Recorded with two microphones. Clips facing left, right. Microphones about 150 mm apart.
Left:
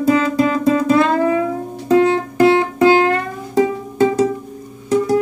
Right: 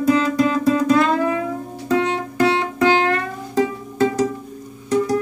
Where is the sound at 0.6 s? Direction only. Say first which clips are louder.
Left 2 dB; 25° left (ahead or behind).